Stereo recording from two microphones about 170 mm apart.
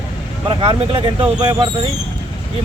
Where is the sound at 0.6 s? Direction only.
30° right (ahead or behind).